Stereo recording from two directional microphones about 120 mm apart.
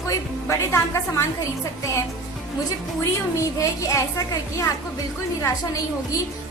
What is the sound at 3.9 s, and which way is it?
Speech, 25° left (ahead or behind).